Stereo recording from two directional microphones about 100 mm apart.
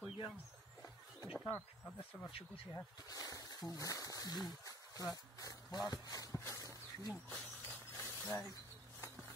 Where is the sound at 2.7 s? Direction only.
35° left (ahead or behind).